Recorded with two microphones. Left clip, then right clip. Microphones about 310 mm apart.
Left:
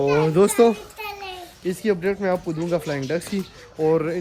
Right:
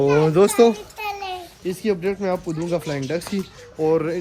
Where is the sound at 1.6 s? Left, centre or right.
Centre.